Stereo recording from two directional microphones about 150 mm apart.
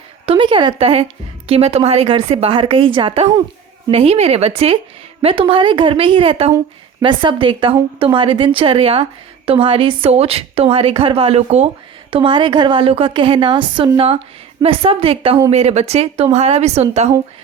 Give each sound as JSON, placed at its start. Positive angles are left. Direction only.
{"t": 0.3, "sound": "a woman's voice", "side_deg": -35}
{"t": 12.1, "sound": "a woman's voice", "side_deg": -35}